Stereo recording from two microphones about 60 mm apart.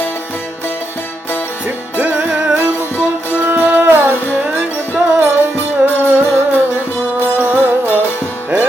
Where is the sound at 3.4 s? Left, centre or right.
Right.